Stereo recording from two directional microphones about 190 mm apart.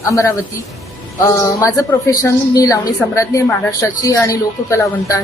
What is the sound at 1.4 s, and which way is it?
A woman's voice, 15° left (ahead or behind).